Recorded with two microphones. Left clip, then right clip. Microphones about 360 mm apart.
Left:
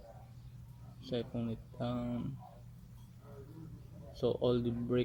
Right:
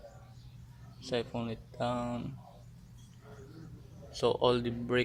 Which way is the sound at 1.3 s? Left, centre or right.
Right.